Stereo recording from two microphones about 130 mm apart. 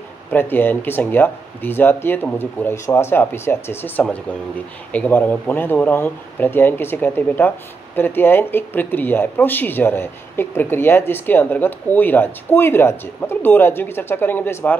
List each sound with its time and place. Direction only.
0.3 s speech: 15° left (ahead or behind)